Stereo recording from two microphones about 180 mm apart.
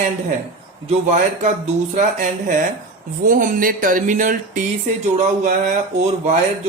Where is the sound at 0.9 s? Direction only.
40° right (ahead or behind).